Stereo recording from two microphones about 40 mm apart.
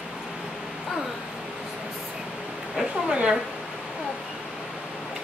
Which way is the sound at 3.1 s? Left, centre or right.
Right.